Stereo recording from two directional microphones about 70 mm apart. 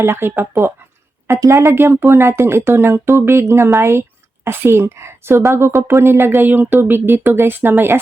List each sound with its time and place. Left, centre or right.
0.0 s speech: right